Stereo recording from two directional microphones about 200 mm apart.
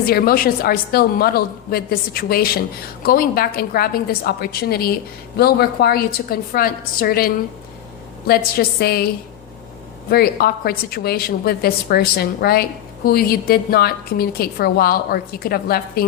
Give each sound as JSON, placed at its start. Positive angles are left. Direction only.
{"t": 0.0, "sound": "a woman's voice", "side_deg": 50}
{"t": 8.5, "sound": "a woman's voice", "side_deg": 50}
{"t": 10.1, "sound": "a woman's voice", "side_deg": 50}